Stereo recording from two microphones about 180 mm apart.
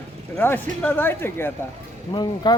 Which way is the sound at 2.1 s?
25° left (ahead or behind).